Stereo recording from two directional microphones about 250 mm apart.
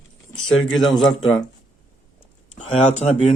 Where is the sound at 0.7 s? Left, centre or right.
Centre.